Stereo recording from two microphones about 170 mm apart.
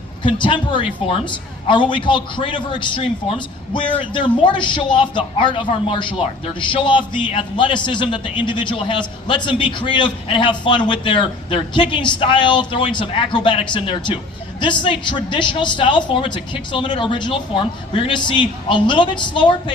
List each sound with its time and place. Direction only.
0.2 s a man's voice: 30° left (ahead or behind)